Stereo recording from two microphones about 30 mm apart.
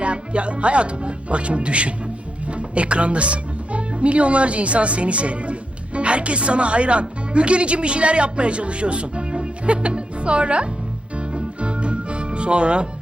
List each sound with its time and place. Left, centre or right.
0.0 s speech: right
11.3 s music: right